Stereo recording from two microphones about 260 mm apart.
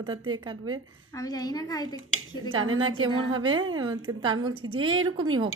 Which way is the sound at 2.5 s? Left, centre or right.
Right.